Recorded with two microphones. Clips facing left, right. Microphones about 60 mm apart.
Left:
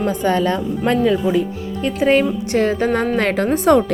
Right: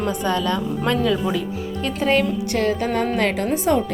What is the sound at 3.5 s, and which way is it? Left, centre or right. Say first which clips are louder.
Speech: left 8 dB; left.